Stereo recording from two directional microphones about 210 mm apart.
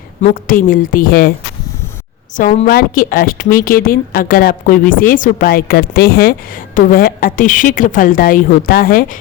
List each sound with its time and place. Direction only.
0.2 s a woman's voice: 40° left (ahead or behind)
2.3 s a woman's voice: 35° left (ahead or behind)